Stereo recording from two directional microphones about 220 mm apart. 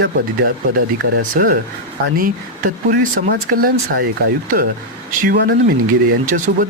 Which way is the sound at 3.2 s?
40° right (ahead or behind).